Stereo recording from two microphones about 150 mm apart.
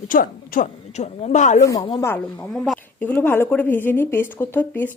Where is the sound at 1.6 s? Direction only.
25° left (ahead or behind).